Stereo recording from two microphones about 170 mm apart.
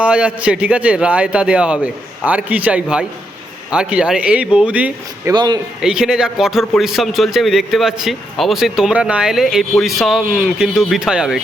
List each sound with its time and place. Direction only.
0.0 s a man's voice: 5° right (ahead or behind)
5.3 s speech: 25° right (ahead or behind)
5.8 s a man's voice: 5° right (ahead or behind)